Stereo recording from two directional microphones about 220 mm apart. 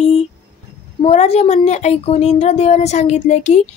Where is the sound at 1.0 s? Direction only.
30° left (ahead or behind).